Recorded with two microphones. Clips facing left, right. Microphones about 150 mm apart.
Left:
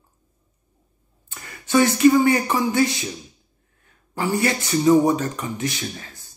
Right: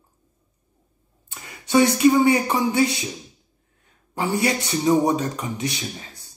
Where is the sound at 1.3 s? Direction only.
20° right (ahead or behind).